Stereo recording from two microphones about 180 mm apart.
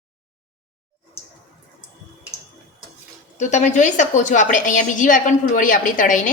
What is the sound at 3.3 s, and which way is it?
A woman's voice, 40° left (ahead or behind).